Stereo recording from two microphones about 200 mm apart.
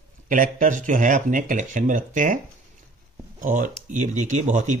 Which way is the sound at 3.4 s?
40° right (ahead or behind).